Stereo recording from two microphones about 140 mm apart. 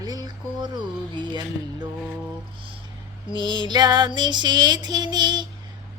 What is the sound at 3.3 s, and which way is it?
Child singing, 35° right (ahead or behind).